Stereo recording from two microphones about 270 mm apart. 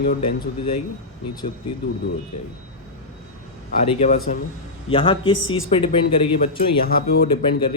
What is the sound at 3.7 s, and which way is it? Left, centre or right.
Speech, left.